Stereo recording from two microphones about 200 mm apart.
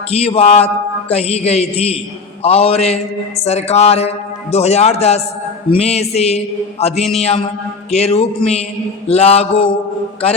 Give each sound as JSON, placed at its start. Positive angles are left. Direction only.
{"t": 0.1, "sound": "a man's voice", "side_deg": 30}
{"t": 2.4, "sound": "mantra", "side_deg": 30}
{"t": 3.4, "sound": "a man's voice", "side_deg": 35}